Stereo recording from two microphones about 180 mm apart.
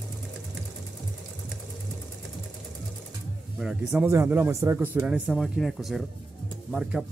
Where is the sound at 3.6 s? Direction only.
5° right (ahead or behind).